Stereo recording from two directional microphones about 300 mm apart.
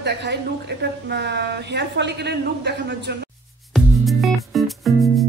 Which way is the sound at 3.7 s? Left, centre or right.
Centre.